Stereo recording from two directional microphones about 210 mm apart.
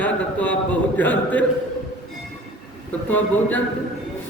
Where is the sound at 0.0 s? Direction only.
10° left (ahead or behind).